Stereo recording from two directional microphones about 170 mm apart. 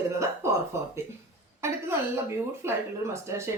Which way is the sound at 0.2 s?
15° right (ahead or behind).